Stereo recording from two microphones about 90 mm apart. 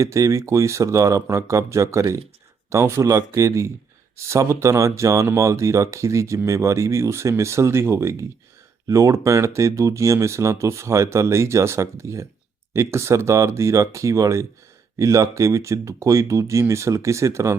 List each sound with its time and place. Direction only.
0.0 s speech: 35° right (ahead or behind)